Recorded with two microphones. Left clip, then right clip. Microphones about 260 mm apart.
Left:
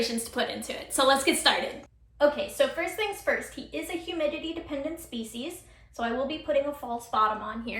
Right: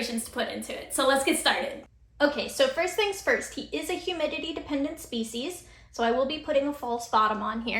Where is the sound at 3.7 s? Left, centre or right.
Right.